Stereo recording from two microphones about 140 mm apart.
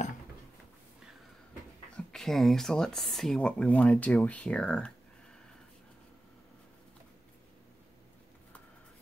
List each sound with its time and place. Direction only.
2.0 s speech: 5° left (ahead or behind)